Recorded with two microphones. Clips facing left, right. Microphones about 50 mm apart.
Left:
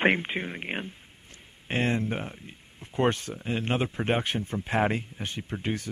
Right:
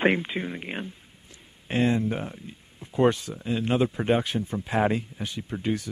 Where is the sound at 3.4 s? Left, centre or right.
Left.